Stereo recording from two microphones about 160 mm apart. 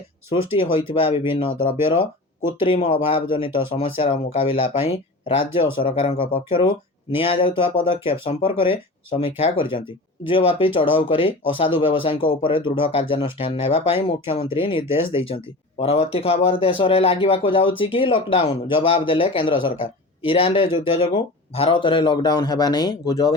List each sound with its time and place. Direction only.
0.5 s speech: 35° left (ahead or behind)